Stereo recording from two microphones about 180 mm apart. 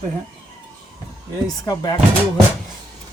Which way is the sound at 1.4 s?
20° left (ahead or behind).